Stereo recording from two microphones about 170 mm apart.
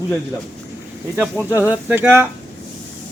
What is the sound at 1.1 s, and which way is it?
Speech, 10° right (ahead or behind).